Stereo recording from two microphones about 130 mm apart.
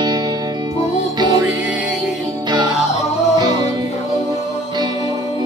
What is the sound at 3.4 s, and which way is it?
Music, 30° right (ahead or behind).